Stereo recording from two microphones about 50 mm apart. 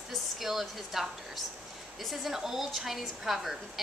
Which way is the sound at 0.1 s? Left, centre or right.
Centre.